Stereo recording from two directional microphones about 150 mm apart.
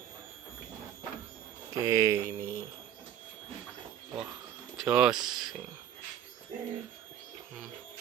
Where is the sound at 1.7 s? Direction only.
20° right (ahead or behind).